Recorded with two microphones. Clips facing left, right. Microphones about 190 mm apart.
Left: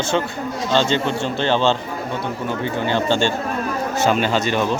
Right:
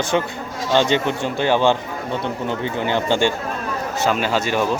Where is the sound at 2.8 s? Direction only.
15° right (ahead or behind).